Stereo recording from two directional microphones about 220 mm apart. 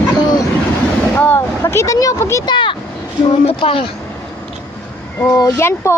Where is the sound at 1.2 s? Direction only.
10° left (ahead or behind).